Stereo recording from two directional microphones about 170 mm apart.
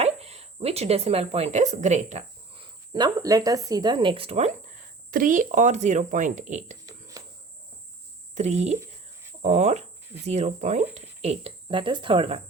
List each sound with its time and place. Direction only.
0.0 s speech: 35° right (ahead or behind)
2.6 s speech: 25° right (ahead or behind)
5.1 s speech: 50° right (ahead or behind)
8.4 s speech: 40° right (ahead or behind)